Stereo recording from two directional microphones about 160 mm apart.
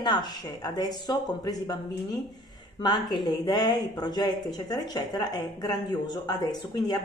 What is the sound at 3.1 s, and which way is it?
A woman's voice, 25° left (ahead or behind).